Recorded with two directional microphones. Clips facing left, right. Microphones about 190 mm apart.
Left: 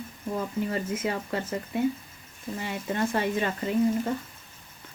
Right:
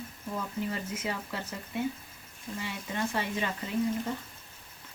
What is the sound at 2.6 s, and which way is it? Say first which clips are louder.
Speech: left 6 dB; 50° left (ahead or behind).